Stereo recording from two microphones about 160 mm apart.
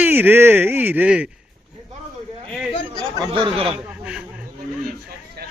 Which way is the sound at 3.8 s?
5° right (ahead or behind).